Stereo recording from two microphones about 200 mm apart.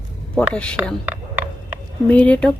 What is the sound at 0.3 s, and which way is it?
Speech, 5° left (ahead or behind).